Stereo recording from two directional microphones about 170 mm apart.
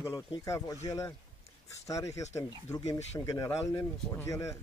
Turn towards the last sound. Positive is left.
turn(degrees=15)  # may be behind; listen again after turning